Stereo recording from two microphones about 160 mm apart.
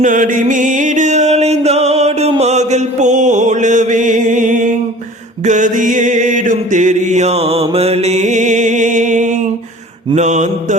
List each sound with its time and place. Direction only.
0.0 s music: 55° right (ahead or behind)
2.4 s mantra: 45° right (ahead or behind)
5.5 s music: 50° right (ahead or behind)
10.2 s mantra: 50° right (ahead or behind)